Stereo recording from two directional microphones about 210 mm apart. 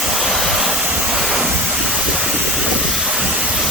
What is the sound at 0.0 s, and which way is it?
Vehicle, centre (ahead or behind).